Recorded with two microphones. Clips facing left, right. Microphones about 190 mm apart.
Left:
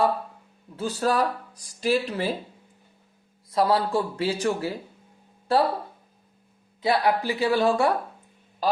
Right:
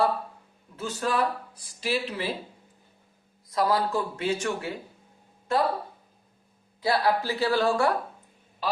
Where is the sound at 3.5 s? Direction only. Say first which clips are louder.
Left 3 dB; 30° left (ahead or behind).